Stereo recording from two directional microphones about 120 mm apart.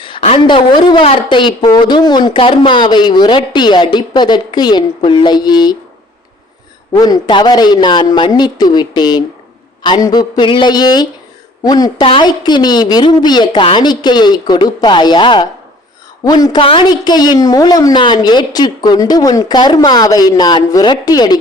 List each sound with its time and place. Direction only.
0.0 s a woman's voice: 50° left (ahead or behind)
6.9 s a woman's voice: 35° left (ahead or behind)